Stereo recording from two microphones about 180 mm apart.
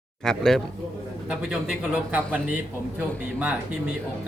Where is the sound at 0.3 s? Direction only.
Centre (ahead or behind).